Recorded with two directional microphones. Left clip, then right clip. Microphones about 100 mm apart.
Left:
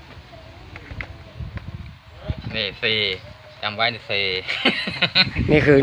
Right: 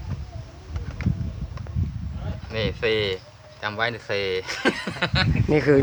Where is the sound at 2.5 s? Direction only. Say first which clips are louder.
Left 2 dB; 85° right.